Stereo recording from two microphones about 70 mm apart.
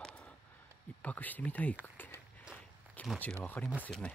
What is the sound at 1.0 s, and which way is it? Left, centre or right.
Speech, left.